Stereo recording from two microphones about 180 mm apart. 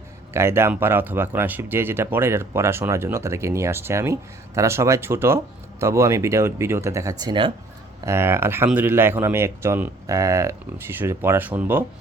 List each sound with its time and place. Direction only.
0.3 s speech: 15° right (ahead or behind)
8.0 s speech: 15° right (ahead or behind)